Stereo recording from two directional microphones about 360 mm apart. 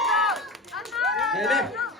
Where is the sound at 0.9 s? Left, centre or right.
Centre.